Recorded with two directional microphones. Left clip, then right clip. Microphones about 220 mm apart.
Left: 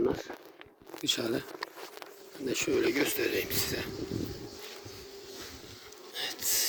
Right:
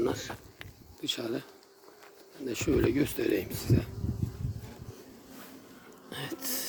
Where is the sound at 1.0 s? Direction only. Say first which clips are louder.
Left 3 dB; centre (ahead or behind).